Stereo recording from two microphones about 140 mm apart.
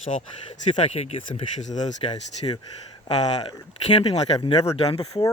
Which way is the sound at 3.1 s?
45° left (ahead or behind).